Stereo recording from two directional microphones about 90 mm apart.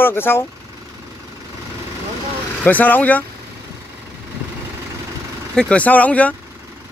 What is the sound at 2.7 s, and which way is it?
Speech, 20° left (ahead or behind).